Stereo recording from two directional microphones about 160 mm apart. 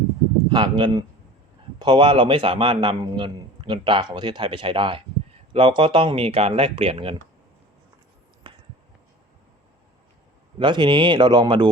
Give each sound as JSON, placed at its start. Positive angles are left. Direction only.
{"t": 0.5, "sound": "a man's voice", "side_deg": -30}
{"t": 8.4, "sound": "a sound", "side_deg": -30}
{"t": 10.6, "sound": "speech", "side_deg": -30}